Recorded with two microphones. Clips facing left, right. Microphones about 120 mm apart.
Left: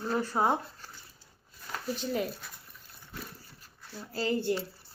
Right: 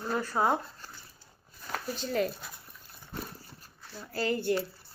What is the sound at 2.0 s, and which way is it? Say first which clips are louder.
Speech: right 3 dB; 15° left (ahead or behind).